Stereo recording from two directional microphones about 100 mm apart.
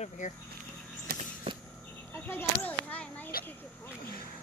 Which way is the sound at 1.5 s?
70° right (ahead or behind).